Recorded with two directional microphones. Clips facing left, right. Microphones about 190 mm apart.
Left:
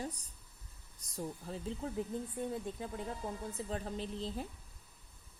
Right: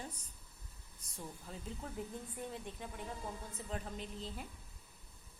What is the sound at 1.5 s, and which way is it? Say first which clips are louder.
Speech: left 6 dB; 35° left (ahead or behind).